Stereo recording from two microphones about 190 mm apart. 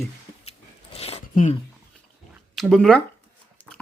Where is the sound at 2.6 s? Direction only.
5° left (ahead or behind).